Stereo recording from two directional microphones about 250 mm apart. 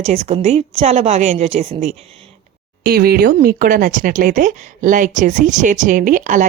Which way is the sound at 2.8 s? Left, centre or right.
Right.